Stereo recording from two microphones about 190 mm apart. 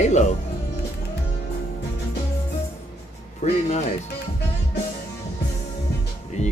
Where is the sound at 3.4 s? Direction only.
35° left (ahead or behind).